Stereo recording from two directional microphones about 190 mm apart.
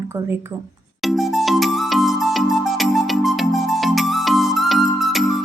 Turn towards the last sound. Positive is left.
turn(degrees=0)  # may be behind; listen again after turning